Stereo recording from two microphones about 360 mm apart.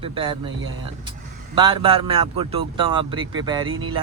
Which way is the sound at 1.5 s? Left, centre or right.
Centre.